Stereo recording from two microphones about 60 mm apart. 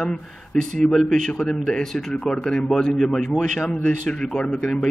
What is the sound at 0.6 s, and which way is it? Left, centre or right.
Speech, centre.